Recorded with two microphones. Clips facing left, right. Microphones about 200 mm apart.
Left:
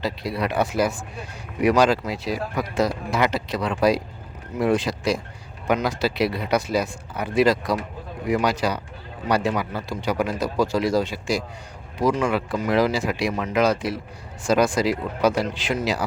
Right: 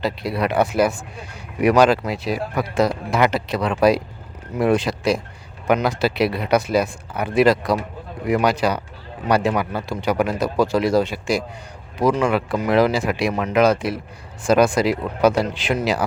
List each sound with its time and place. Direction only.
0.0 s speech: 65° right (ahead or behind)